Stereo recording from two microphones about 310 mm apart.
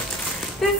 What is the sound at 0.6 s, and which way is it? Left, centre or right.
Speech, centre.